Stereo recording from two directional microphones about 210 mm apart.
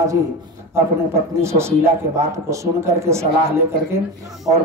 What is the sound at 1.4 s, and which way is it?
A man's voice, 15° right (ahead or behind).